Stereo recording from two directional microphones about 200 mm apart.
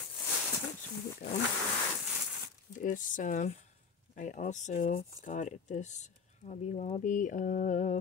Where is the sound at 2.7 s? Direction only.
40° left (ahead or behind).